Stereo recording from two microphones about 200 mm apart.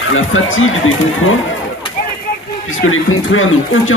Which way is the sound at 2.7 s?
80° left.